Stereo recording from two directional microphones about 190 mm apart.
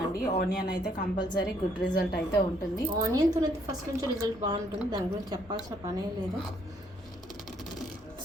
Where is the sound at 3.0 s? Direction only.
20° right (ahead or behind).